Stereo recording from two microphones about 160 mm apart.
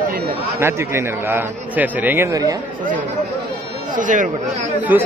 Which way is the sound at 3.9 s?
55° right (ahead or behind).